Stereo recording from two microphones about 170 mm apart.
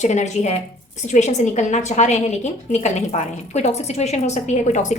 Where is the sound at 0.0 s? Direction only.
40° left (ahead or behind).